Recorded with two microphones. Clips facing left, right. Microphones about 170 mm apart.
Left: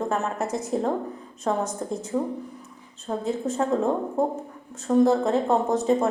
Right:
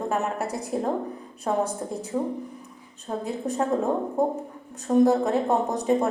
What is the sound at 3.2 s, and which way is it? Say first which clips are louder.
A woman's voice: left 1 dB; 15° right (ahead or behind).